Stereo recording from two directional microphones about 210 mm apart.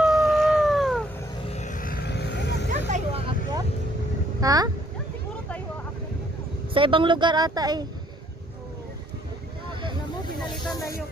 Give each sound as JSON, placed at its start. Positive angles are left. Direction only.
{"t": 0.0, "sound": "howl", "side_deg": 0}
{"t": 1.4, "sound": "vehicle", "side_deg": 30}
{"t": 2.9, "sound": "vehicle", "side_deg": -20}
{"t": 4.4, "sound": "speech", "side_deg": -15}
{"t": 6.7, "sound": "speech", "side_deg": -25}
{"t": 10.7, "sound": "music", "side_deg": 15}